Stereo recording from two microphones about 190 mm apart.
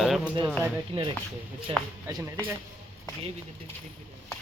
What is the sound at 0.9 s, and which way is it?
Speech, 30° right (ahead or behind).